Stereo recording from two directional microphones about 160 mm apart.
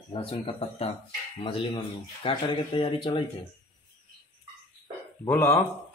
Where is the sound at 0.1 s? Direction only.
35° left (ahead or behind).